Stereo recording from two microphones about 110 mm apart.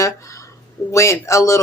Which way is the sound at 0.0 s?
30° left (ahead or behind).